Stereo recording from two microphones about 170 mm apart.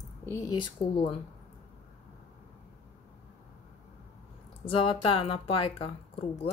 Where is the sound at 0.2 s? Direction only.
15° left (ahead or behind).